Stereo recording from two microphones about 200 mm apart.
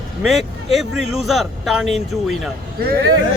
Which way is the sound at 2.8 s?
50° right (ahead or behind).